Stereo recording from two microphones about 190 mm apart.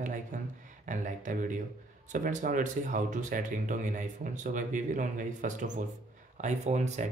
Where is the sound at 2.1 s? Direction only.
45° right (ahead or behind).